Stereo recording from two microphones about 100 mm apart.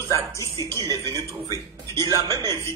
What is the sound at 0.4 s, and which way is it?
Speech, 30° left (ahead or behind).